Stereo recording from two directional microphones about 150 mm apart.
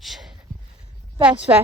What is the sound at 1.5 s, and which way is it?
Speech, 15° right (ahead or behind).